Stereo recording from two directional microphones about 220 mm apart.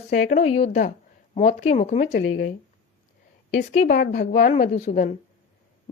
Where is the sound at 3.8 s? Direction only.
35° left (ahead or behind).